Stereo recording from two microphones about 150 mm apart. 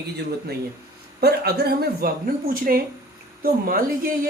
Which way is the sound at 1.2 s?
90° right.